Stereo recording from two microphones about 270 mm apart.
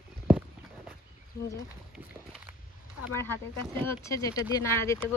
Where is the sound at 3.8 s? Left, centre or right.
Centre.